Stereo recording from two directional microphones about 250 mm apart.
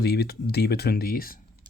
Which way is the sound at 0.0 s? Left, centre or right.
Left.